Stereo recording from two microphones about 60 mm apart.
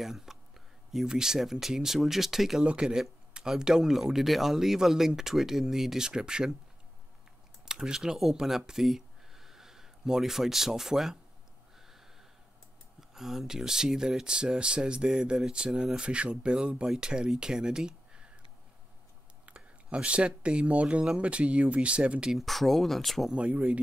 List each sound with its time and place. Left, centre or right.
0.0 s a sound: centre
0.9 s speech: centre
2.6 s speech: centre
7.6 s speech: centre
13.1 s speech: centre
19.4 s speech: centre
22.3 s speech: centre
23.3 s speech: right